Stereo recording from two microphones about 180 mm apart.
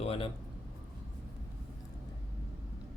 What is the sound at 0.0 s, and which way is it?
Speech, 35° left (ahead or behind).